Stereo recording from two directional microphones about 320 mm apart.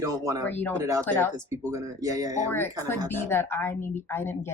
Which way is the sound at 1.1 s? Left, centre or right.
Centre.